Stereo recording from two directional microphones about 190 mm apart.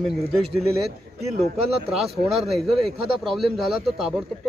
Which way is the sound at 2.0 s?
Centre (ahead or behind).